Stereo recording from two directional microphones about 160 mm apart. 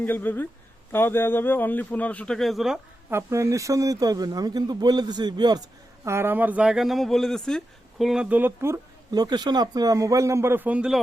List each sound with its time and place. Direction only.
0.0 s a man's voice: 10° left (ahead or behind)
3.1 s speech: 15° right (ahead or behind)
6.1 s speech: 15° right (ahead or behind)